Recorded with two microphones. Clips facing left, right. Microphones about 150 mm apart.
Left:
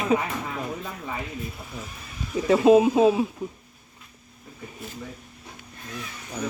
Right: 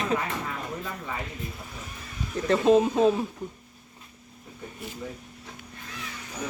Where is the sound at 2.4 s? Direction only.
5° left (ahead or behind).